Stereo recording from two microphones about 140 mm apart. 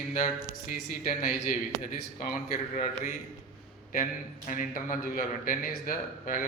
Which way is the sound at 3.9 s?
70° left (ahead or behind).